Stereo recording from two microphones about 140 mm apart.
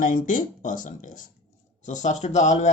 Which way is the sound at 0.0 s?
70° left (ahead or behind).